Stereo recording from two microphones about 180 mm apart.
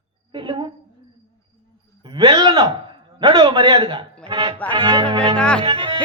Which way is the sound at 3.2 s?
25° right (ahead or behind).